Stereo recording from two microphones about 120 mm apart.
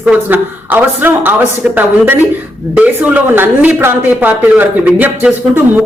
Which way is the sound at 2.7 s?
10° right (ahead or behind).